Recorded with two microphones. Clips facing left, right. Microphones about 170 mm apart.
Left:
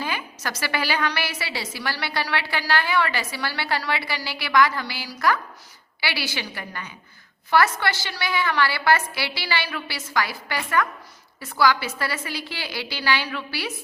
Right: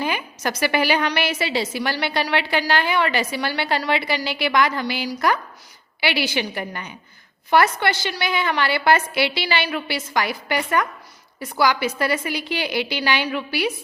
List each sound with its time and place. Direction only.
0.0 s a woman's voice: 20° right (ahead or behind)